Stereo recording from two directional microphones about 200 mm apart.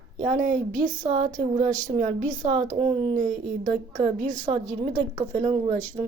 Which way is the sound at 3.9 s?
40° right (ahead or behind).